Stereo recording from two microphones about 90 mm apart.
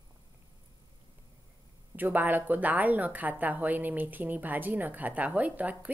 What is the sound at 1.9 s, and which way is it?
A woman's voice, 20° right (ahead or behind).